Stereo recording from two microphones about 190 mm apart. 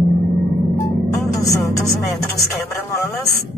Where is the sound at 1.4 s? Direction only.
20° left (ahead or behind).